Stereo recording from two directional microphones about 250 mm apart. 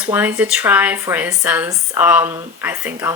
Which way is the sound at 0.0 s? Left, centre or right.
Centre.